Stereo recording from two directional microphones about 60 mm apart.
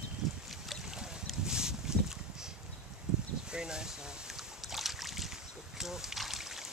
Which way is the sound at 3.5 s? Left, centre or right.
Centre.